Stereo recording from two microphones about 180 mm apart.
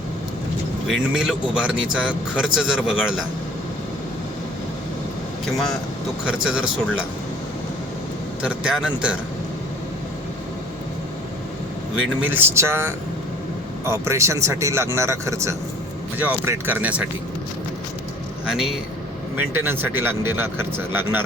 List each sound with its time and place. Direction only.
0.9 s speech: centre (ahead or behind)
5.5 s speech: centre (ahead or behind)
8.4 s speech: 5° right (ahead or behind)
11.9 s speech: 10° right (ahead or behind)
18.4 s speech: centre (ahead or behind)